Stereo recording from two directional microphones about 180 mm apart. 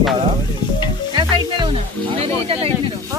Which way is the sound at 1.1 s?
25° right (ahead or behind).